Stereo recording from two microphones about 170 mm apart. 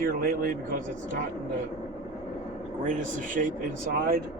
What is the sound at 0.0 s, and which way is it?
Speech, 55° right (ahead or behind).